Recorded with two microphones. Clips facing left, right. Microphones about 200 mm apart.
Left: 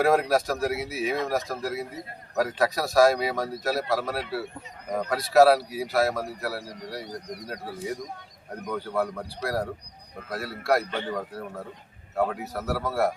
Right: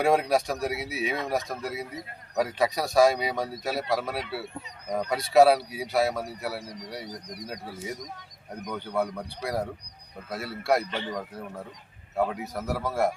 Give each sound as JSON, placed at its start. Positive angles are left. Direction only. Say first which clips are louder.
{"t": 0.0, "sound": "speech", "louder": "left 1 dB", "side_deg": 0}
{"t": 10.8, "sound": "speech", "louder": "left 2 dB", "side_deg": 50}
{"t": 12.1, "sound": "speech", "louder": "left 1 dB", "side_deg": 0}